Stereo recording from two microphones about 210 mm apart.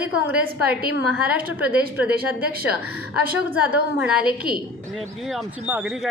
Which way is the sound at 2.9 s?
90° right.